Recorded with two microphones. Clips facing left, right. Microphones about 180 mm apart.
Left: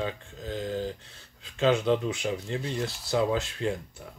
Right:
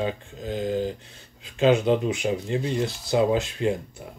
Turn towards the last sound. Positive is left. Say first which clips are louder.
# right 5 dB
turn(degrees=-15)  # may be behind; listen again after turning